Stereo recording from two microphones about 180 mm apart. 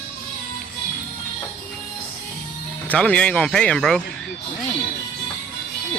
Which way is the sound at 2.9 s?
5° left (ahead or behind).